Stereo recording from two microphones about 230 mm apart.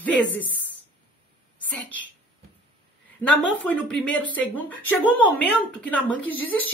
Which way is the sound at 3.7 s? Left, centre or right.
Centre.